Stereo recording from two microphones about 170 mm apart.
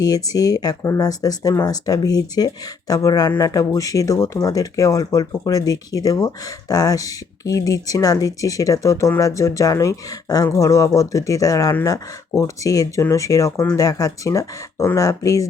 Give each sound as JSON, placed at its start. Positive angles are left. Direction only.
{"t": 0.0, "sound": "speech", "side_deg": 20}